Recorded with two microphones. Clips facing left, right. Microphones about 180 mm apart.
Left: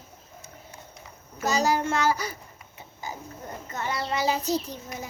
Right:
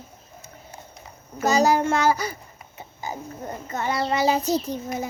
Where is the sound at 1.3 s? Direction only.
50° right (ahead or behind).